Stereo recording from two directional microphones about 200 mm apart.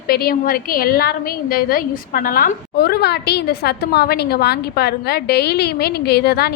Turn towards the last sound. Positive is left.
turn(degrees=55)  # may be behind; listen again after turning